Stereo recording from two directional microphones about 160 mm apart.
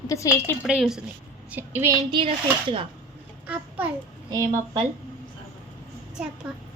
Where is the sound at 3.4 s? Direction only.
10° right (ahead or behind).